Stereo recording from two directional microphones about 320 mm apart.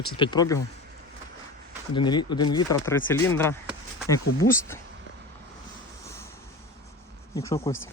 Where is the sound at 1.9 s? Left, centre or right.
Centre.